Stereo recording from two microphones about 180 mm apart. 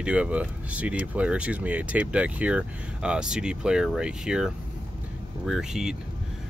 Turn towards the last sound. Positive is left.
turn(degrees=-5)  # may be behind; listen again after turning